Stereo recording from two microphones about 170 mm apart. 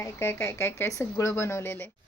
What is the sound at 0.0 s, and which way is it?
Speech, 15° left (ahead or behind).